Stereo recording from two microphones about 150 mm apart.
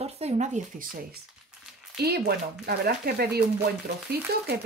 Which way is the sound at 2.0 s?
90° right.